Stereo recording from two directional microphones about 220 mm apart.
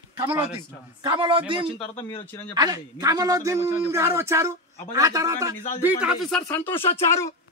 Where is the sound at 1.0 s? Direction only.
20° right (ahead or behind).